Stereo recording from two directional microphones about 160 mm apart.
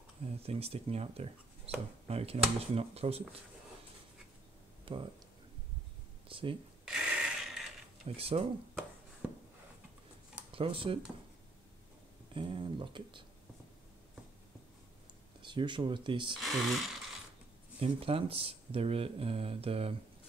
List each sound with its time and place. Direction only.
0.4 s speech: 40° right (ahead or behind)
4.9 s speech: 35° right (ahead or behind)
6.2 s speech: 35° right (ahead or behind)
6.9 s a sound: 5° right (ahead or behind)
8.0 s speech: 40° right (ahead or behind)
10.5 s speech: 35° right (ahead or behind)
12.4 s speech: 30° right (ahead or behind)
15.4 s speech: 30° right (ahead or behind)
16.3 s speech: centre (ahead or behind)
17.7 s speech: 35° right (ahead or behind)